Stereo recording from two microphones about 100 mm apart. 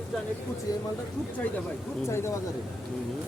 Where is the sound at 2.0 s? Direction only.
25° left (ahead or behind).